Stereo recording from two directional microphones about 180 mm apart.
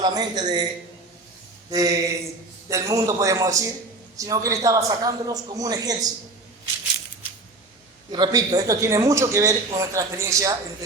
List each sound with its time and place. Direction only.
0.0 s a man's voice: 20° right (ahead or behind)
1.7 s a man's voice: 20° right (ahead or behind)
8.1 s a man's voice: 20° right (ahead or behind)